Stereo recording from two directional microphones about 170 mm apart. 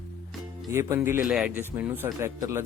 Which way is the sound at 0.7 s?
15° right (ahead or behind).